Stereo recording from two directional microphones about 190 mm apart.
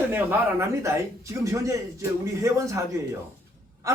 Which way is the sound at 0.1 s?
10° right (ahead or behind).